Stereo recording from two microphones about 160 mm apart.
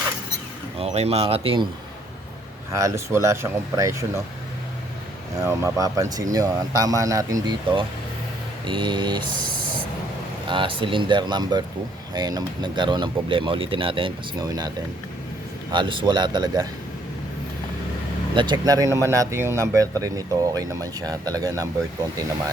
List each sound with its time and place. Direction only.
0.8 s speech: 40° right (ahead or behind)
2.7 s speech: 20° right (ahead or behind)
5.4 s speech: 20° right (ahead or behind)
8.6 s speech: 30° right (ahead or behind)
10.5 s speech: 35° right (ahead or behind)
15.7 s speech: 30° right (ahead or behind)
18.3 s speech: 30° right (ahead or behind)